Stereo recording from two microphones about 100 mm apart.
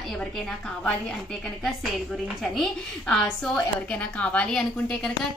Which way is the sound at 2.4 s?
5° left (ahead or behind).